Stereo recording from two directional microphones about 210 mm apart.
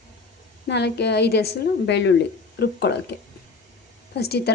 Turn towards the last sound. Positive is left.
turn(degrees=50)  # may be behind; listen again after turning